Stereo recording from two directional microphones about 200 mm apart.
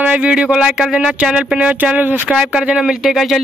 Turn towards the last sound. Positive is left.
turn(degrees=0)  # may be behind; listen again after turning